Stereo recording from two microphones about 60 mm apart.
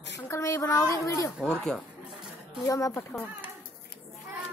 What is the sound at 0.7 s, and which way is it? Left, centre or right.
Speech, left.